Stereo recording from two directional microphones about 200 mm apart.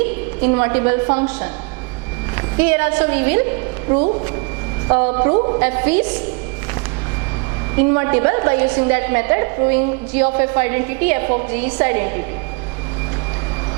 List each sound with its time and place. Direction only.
0.0 s a woman's voice: 10° right (ahead or behind)
5.3 s a woman's voice: 30° right (ahead or behind)
5.5 s a woman's voice: 10° right (ahead or behind)
7.8 s a woman's voice: 15° right (ahead or behind)